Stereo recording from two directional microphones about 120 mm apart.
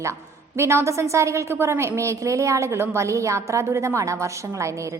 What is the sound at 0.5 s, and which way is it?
A woman's voice, 20° right (ahead or behind).